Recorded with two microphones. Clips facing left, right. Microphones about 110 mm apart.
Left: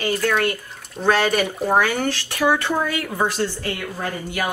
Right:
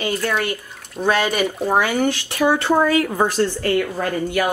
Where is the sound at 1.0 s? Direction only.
10° right (ahead or behind).